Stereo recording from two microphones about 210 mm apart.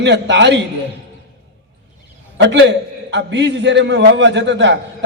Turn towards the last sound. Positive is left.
turn(degrees=-55)  # may be behind; listen again after turning